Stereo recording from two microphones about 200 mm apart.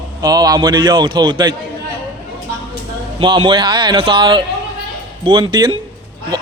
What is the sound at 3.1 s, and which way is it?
Speech, 25° right (ahead or behind).